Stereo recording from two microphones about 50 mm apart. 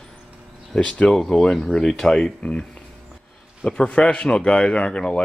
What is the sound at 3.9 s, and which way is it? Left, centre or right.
A man's voice, left.